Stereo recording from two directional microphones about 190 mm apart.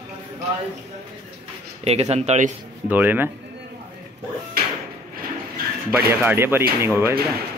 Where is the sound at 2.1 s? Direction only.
35° right (ahead or behind).